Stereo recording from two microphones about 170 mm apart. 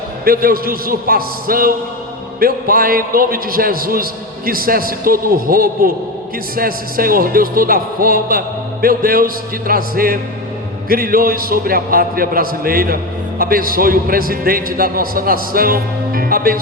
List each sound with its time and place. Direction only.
0.3 s a man's voice: 60° right (ahead or behind)